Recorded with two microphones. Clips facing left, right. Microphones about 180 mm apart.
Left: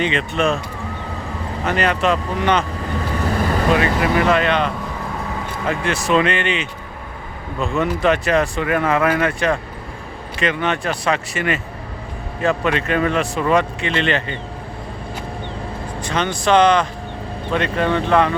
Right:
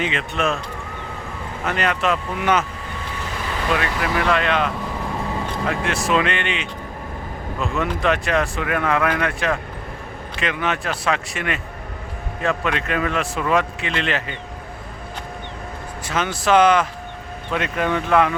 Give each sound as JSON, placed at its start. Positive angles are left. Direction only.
{"t": 0.0, "sound": "speech", "side_deg": 0}
{"t": 1.6, "sound": "speech", "side_deg": 0}
{"t": 3.3, "sound": "vehicle", "side_deg": 45}
{"t": 3.8, "sound": "speech", "side_deg": 5}
{"t": 16.0, "sound": "speech", "side_deg": -5}